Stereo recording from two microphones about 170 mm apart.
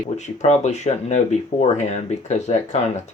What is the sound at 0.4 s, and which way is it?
Speech, 40° left (ahead or behind).